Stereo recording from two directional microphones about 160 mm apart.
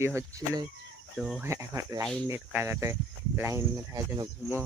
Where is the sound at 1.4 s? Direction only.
20° right (ahead or behind).